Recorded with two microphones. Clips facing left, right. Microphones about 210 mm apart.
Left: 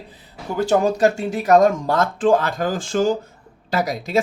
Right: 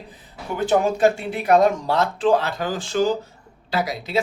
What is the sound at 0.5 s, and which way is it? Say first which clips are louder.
Speech: left 2 dB; 40° left (ahead or behind).